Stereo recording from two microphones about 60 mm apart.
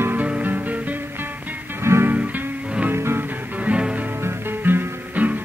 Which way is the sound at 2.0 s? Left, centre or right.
Right.